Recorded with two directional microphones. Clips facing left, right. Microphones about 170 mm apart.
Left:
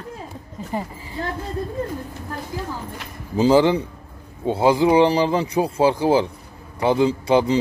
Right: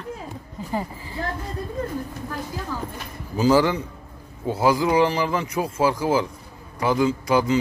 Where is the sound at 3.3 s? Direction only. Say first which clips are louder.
Left 3 dB; 25° left (ahead or behind).